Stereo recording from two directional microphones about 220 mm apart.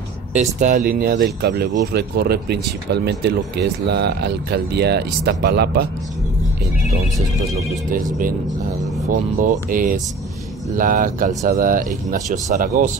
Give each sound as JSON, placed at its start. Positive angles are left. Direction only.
{"t": 0.4, "sound": "speech", "side_deg": -35}
{"t": 9.1, "sound": "speech", "side_deg": -35}